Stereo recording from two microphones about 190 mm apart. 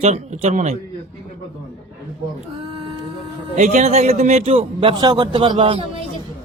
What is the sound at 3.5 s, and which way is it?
A man's voice, 40° right (ahead or behind).